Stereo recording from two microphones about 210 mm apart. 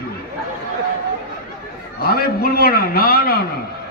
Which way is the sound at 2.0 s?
45° left (ahead or behind).